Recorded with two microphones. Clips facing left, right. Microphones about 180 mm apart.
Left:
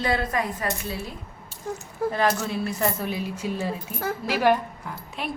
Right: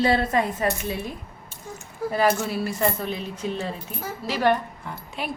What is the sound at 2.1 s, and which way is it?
A woman's voice, 5° right (ahead or behind).